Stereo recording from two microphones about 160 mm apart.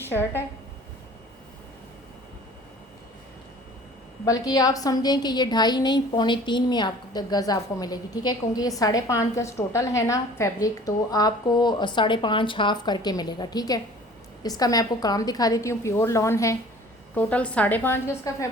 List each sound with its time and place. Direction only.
0.1 s a woman's voice: 15° left (ahead or behind)
4.3 s a woman's voice: 25° left (ahead or behind)
17.2 s a woman's voice: 10° left (ahead or behind)